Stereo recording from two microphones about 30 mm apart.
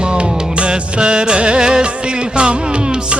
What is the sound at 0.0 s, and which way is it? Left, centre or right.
Music, right.